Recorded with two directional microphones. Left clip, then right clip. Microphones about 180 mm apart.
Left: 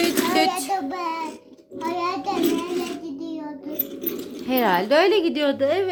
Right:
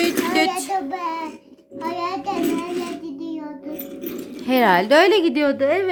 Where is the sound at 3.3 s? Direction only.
10° right (ahead or behind).